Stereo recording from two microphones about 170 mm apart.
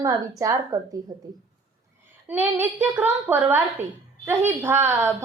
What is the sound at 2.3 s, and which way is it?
A woman's voice, 10° right (ahead or behind).